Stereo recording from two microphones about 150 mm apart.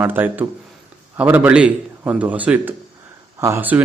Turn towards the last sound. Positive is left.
turn(degrees=-10)  # may be behind; listen again after turning